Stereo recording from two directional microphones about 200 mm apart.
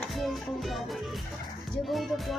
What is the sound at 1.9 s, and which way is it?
Speech, centre (ahead or behind).